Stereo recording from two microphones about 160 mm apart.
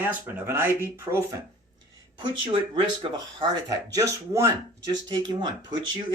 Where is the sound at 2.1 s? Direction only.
30° right (ahead or behind).